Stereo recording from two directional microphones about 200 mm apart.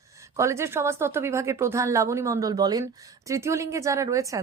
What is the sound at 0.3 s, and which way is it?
A woman's voice, 15° right (ahead or behind).